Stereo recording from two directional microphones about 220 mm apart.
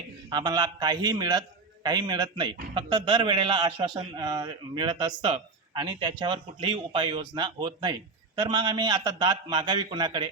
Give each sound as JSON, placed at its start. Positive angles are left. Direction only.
{"t": 0.3, "sound": "a man's voice", "side_deg": -20}